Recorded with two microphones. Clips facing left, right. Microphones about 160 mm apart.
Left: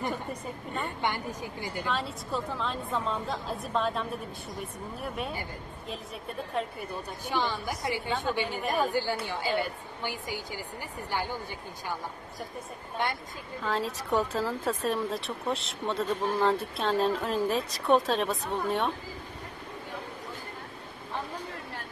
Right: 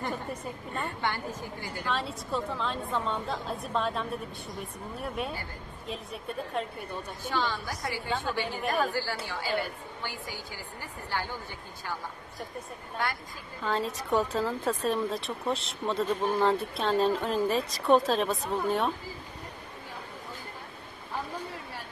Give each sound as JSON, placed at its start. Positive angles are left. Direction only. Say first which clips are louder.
{"t": 0.8, "sound": "a woman's voice", "louder": "left 1 dB", "side_deg": 15}
{"t": 1.9, "sound": "speech", "louder": "right 2 dB", "side_deg": 0}
{"t": 6.6, "sound": "speech", "louder": "left 2 dB", "side_deg": 0}
{"t": 7.2, "sound": "a woman's voice", "louder": "left 1 dB", "side_deg": 15}
{"t": 8.6, "sound": "speech", "louder": "even", "side_deg": 0}
{"t": 8.9, "sound": "a woman's voice", "louder": "left 3 dB", "side_deg": 20}
{"t": 12.9, "sound": "a woman's voice", "louder": "left 1 dB", "side_deg": 20}
{"t": 13.6, "sound": "speech", "louder": "right 1 dB", "side_deg": 0}